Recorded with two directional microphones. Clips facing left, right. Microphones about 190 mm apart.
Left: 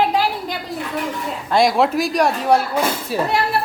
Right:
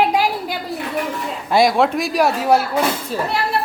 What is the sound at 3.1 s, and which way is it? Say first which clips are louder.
Speech: left 2 dB; 10° left (ahead or behind).